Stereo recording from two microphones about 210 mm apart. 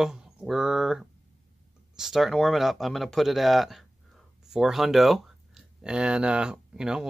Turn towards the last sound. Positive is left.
turn(degrees=-5)  # may be behind; listen again after turning